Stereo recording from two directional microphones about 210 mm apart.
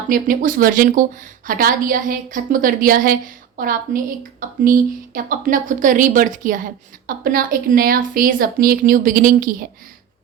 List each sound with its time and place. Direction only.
0.1 s speech: 40° right (ahead or behind)